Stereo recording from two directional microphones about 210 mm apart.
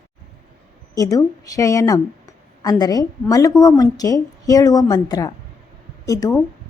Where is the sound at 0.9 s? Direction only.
15° left (ahead or behind).